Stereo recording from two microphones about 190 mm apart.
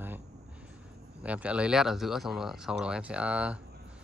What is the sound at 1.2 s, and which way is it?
Speech, 5° right (ahead or behind).